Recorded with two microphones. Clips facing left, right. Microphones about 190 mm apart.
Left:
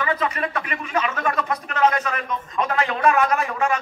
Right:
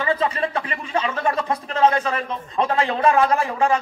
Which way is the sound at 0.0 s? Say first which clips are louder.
Right 2 dB; 30° right (ahead or behind).